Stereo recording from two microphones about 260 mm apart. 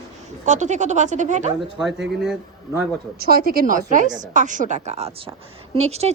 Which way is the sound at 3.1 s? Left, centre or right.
Right.